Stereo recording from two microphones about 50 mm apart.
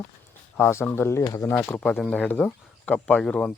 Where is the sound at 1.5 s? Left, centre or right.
Left.